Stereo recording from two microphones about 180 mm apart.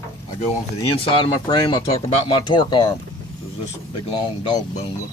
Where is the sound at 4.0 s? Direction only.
30° left (ahead or behind).